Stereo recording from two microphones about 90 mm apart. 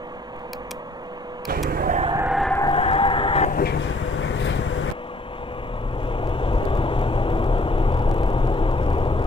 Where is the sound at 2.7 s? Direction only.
85° left.